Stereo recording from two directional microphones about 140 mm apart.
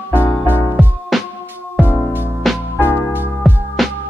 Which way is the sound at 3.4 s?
Centre (ahead or behind).